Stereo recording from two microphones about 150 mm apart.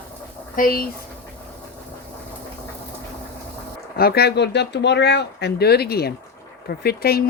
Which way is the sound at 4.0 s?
90° left.